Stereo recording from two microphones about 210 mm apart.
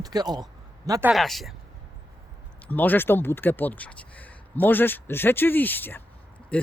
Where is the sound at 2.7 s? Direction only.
10° left (ahead or behind).